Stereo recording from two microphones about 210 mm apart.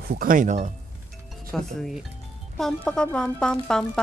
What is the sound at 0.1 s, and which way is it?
Speech, 40° right (ahead or behind).